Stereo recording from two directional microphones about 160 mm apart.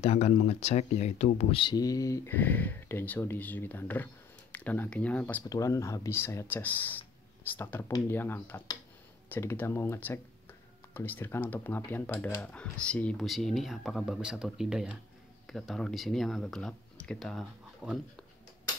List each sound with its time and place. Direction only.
0.0 s speech: 40° left (ahead or behind); by 5.4 s 10° left (ahead or behind)
5.4 s speech: 20° left (ahead or behind); by 17.9 s centre (ahead or behind)